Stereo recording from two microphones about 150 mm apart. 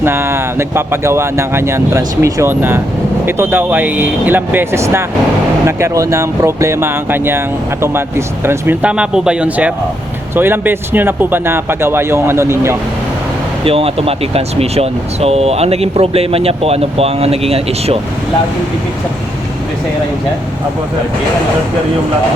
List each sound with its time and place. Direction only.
0.0 s speech: 15° right (ahead or behind)
13.7 s speech: 40° right (ahead or behind)